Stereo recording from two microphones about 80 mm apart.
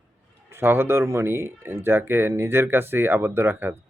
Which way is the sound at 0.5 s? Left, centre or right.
Right.